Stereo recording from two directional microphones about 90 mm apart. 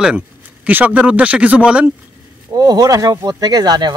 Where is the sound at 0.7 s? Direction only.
20° right (ahead or behind).